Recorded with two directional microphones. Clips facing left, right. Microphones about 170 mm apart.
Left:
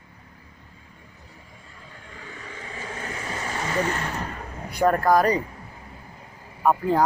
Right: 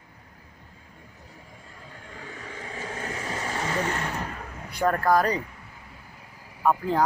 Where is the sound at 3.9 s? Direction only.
10° right (ahead or behind).